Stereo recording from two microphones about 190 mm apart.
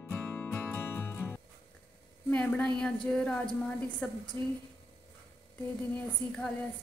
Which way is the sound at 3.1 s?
5° left (ahead or behind).